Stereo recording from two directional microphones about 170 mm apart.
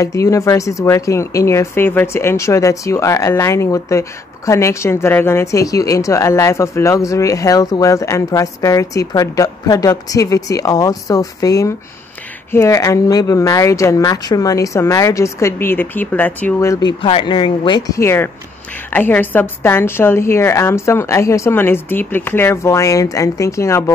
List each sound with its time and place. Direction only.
0.0 s a woman's voice: 20° left (ahead or behind)
17.0 s a woman's voice: 30° left (ahead or behind)